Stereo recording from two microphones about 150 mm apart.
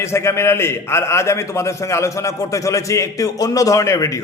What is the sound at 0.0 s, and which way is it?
A man's voice, 15° left (ahead or behind).